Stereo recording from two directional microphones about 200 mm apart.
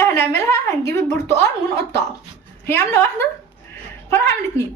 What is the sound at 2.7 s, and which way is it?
A woman's voice, 10° left (ahead or behind).